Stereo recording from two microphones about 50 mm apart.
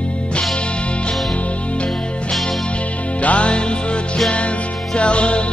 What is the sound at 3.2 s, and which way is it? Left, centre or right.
Music, left.